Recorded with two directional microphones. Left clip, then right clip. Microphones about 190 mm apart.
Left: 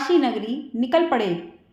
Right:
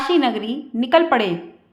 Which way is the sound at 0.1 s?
15° right (ahead or behind).